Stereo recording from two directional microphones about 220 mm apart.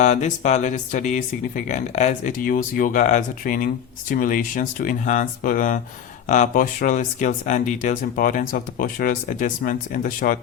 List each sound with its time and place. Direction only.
0.0 s speech: 30° left (ahead or behind)